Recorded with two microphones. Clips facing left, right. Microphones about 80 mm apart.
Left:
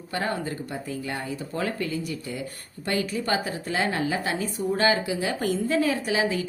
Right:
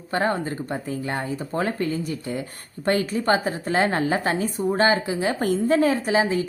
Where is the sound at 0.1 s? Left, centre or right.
Right.